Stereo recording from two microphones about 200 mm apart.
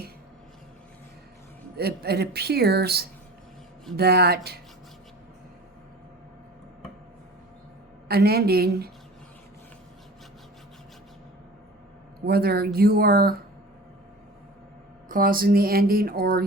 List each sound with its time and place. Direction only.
1.7 s speech: 50° right (ahead or behind)
8.0 s speech: 50° right (ahead or behind)
12.2 s speech: 50° right (ahead or behind)
15.1 s speech: 45° right (ahead or behind)